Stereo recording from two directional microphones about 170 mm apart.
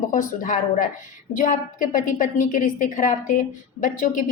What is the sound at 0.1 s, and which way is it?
A woman's voice, 50° left (ahead or behind).